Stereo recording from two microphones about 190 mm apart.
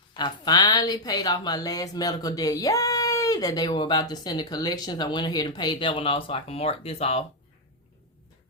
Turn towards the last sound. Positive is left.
turn(degrees=30)  # may be behind; listen again after turning